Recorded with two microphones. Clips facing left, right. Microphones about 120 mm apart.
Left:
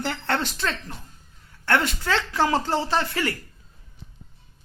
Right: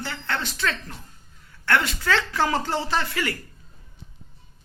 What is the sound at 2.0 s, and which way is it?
Speech, 15° left (ahead or behind).